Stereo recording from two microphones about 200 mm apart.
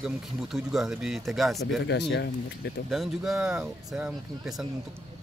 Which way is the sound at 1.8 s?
60° left (ahead or behind).